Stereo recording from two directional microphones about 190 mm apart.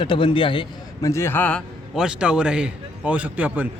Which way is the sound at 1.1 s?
15° left (ahead or behind).